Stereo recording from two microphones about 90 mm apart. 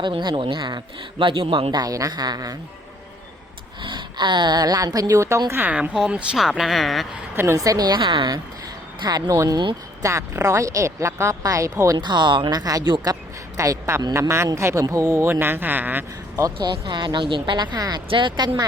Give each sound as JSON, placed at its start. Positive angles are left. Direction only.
{"t": 0.0, "sound": "speech", "side_deg": -60}
{"t": 1.2, "sound": "speech", "side_deg": -70}
{"t": 1.7, "sound": "a woman's voice", "side_deg": -45}
{"t": 3.8, "sound": "speech", "side_deg": -55}
{"t": 5.5, "sound": "speech", "side_deg": -25}
{"t": 5.7, "sound": "speech", "side_deg": -10}
{"t": 7.3, "sound": "speech", "side_deg": -35}
{"t": 7.9, "sound": "a woman's voice", "side_deg": -60}
{"t": 11.9, "sound": "a woman's voice", "side_deg": -55}
{"t": 13.6, "sound": "speech", "side_deg": -30}
{"t": 15.3, "sound": "speech", "side_deg": -25}
{"t": 16.6, "sound": "speech", "side_deg": -65}
{"t": 18.1, "sound": "speech", "side_deg": -60}